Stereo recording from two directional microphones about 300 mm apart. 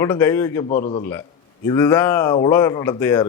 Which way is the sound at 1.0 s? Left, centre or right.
Centre.